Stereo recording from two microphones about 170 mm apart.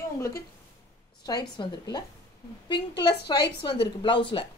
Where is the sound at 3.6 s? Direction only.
30° left (ahead or behind).